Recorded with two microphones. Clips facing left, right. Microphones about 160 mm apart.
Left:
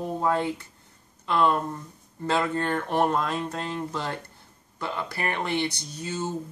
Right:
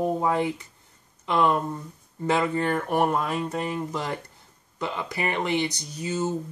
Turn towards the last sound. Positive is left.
turn(degrees=-15)  # may be behind; listen again after turning